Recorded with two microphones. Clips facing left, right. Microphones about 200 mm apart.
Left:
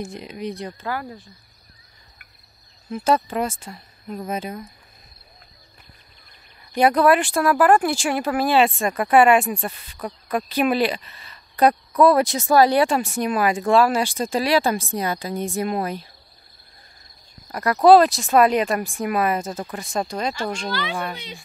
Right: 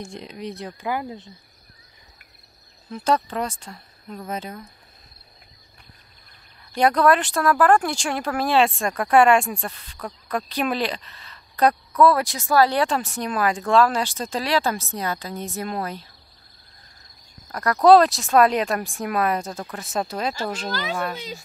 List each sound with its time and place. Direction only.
0.0 s speech: 5° left (ahead or behind)
0.7 s speech: 15° right (ahead or behind)
2.9 s speech: 10° left (ahead or behind)
6.8 s speech: 5° left (ahead or behind)
12.0 s speech: 20° left (ahead or behind)
17.5 s speech: 10° left (ahead or behind)